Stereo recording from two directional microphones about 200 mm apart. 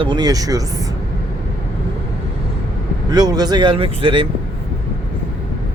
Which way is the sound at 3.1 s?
20° right (ahead or behind).